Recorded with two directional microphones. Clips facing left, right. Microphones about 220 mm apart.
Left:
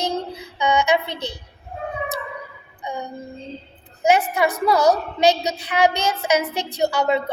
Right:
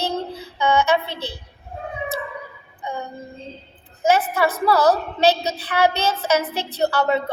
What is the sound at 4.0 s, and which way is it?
A woman's voice, 15° left (ahead or behind).